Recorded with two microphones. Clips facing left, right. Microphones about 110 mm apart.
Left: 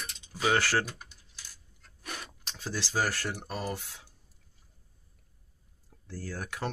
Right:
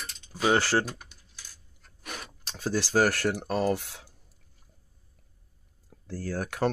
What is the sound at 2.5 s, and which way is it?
Speech, 50° right (ahead or behind).